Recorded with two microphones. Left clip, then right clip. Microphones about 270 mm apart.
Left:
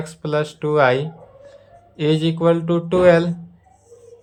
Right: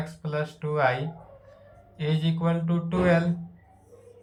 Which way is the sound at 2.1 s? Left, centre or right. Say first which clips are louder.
Left 12 dB; left.